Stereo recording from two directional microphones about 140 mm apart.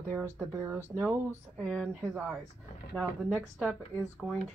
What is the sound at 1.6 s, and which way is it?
Speech, 5° left (ahead or behind).